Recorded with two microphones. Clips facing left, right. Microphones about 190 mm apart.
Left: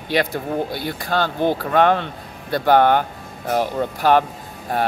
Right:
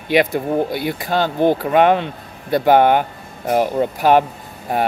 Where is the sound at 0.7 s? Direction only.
15° right (ahead or behind).